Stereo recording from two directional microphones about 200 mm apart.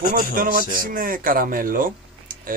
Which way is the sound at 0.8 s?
45° right (ahead or behind).